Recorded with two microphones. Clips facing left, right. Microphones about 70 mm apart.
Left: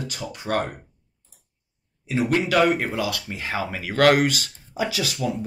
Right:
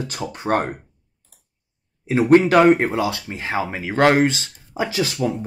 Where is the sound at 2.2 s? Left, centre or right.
Right.